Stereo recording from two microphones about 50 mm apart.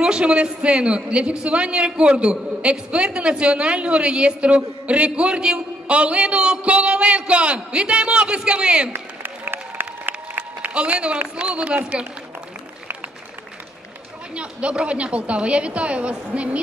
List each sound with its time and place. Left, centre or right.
0.0 s a man's voice: centre
8.9 s applause: right
10.3 s applause: right
11.3 s a man's voice: right
14.3 s a man's voice: right